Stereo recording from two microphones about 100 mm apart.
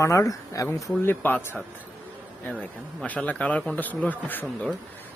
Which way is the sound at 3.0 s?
15° left (ahead or behind).